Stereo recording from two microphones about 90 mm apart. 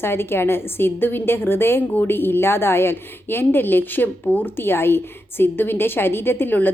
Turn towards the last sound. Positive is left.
turn(degrees=20)  # may be behind; listen again after turning